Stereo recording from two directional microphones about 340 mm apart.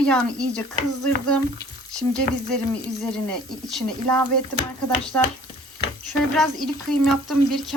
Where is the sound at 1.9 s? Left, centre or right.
Centre.